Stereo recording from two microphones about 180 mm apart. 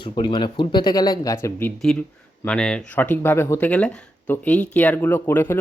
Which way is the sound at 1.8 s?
5° left (ahead or behind).